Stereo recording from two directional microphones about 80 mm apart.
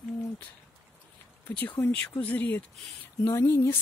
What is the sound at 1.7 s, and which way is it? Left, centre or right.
Speech, left.